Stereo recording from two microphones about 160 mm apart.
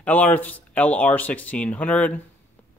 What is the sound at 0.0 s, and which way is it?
Speech, 10° left (ahead or behind).